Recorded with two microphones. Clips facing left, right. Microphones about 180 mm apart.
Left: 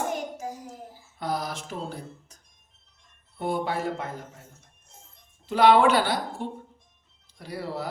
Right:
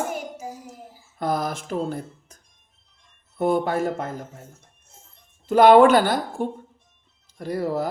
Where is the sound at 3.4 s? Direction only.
50° right (ahead or behind).